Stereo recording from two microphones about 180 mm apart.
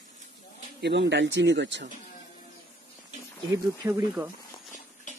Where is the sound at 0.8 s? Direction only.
75° right (ahead or behind).